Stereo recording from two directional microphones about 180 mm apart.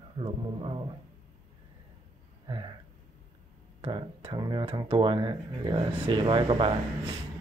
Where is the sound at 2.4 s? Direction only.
25° right (ahead or behind).